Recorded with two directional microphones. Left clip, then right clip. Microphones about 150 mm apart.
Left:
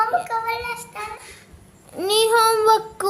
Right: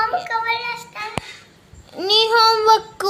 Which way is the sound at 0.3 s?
25° left (ahead or behind).